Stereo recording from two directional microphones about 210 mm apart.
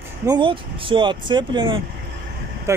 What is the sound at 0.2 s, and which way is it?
Speech, 20° right (ahead or behind).